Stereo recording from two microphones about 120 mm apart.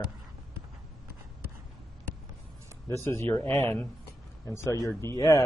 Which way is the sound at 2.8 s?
20° left (ahead or behind).